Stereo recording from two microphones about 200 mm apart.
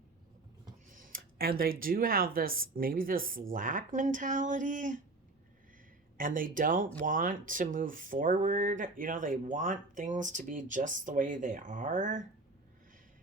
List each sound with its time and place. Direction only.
0.9 s speech: 45° right (ahead or behind)
6.1 s speech: 45° right (ahead or behind)